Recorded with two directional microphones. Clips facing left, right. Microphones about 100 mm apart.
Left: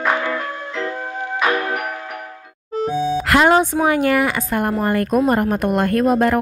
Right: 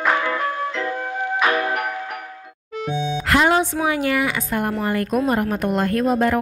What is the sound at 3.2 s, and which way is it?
Music, 60° left (ahead or behind).